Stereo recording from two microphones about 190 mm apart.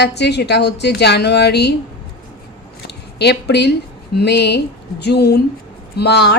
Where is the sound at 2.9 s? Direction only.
60° left (ahead or behind).